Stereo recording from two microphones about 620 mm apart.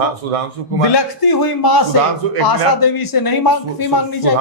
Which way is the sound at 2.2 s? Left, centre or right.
Right.